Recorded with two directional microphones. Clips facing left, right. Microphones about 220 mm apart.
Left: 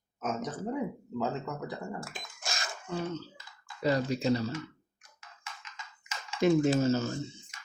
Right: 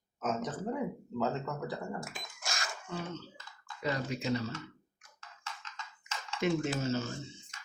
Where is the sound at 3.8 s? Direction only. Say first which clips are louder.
Left 6 dB; 35° left (ahead or behind).